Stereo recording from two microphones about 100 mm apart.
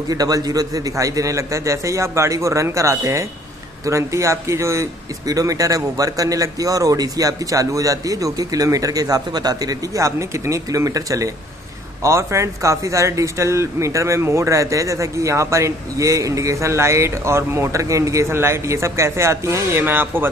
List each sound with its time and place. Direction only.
0.1 s a man's voice: 40° right (ahead or behind); by 20.2 s 20° right (ahead or behind)